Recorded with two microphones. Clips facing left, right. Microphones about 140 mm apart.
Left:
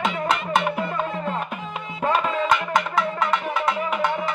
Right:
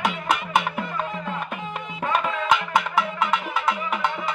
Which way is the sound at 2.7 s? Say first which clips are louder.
Left 1 dB; 5° right (ahead or behind).